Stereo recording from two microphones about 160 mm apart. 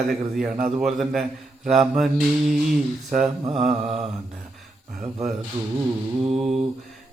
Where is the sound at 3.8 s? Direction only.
35° right (ahead or behind).